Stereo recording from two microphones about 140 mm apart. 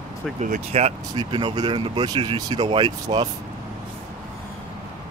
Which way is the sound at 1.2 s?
35° right (ahead or behind).